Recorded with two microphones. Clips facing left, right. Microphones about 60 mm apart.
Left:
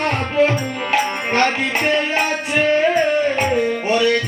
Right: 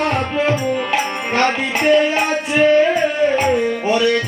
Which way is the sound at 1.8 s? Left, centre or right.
Centre.